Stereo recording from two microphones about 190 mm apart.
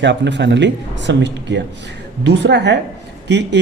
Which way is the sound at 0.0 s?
65° right (ahead or behind).